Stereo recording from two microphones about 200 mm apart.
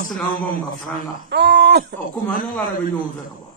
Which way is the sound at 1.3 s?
55° right (ahead or behind).